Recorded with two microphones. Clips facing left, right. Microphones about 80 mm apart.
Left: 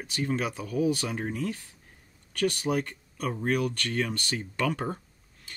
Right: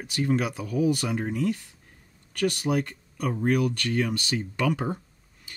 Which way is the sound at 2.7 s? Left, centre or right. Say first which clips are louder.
Right 2 dB; centre.